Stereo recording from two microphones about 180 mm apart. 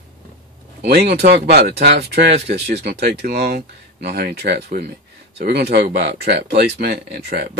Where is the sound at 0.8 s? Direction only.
60° right (ahead or behind).